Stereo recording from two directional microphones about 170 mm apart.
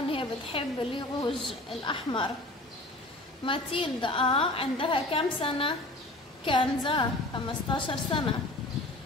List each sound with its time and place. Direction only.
0.1 s a woman's voice: 30° left (ahead or behind)
1.4 s speech: centre (ahead or behind)
1.9 s a woman's voice: 30° left (ahead or behind)
3.4 s a woman's voice: 30° left (ahead or behind)